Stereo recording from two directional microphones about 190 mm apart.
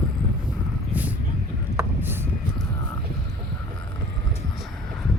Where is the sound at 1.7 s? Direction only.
10° right (ahead or behind).